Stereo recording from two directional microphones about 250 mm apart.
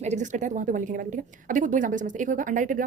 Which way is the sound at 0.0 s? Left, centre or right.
Right.